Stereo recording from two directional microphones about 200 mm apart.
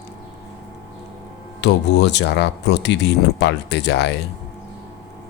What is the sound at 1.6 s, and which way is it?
Speech, 60° left (ahead or behind).